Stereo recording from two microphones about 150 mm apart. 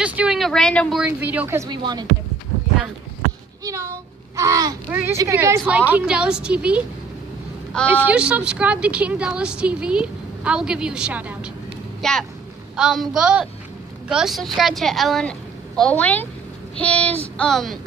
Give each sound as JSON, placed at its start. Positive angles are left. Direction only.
{"t": 0.0, "sound": "a woman's voice", "side_deg": -10}
{"t": 1.7, "sound": "a sound", "side_deg": -30}
{"t": 3.6, "sound": "speech", "side_deg": -20}
{"t": 4.4, "sound": "a sound", "side_deg": -20}
{"t": 4.8, "sound": "a woman's voice", "side_deg": -15}
{"t": 7.9, "sound": "a woman's voice", "side_deg": -10}
{"t": 12.0, "sound": "a woman's voice", "side_deg": 0}